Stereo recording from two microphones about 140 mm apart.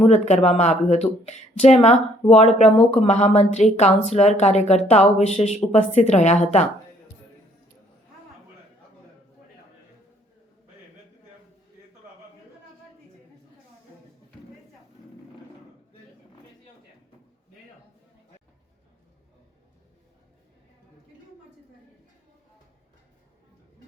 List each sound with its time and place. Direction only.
0.0 s speech: 50° left (ahead or behind)